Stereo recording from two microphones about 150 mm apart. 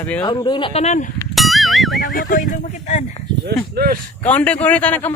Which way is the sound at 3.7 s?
75° right (ahead or behind).